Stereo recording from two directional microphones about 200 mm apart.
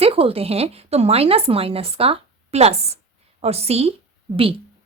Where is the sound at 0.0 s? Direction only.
30° right (ahead or behind).